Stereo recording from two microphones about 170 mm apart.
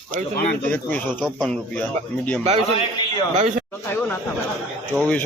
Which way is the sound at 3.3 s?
45° right (ahead or behind).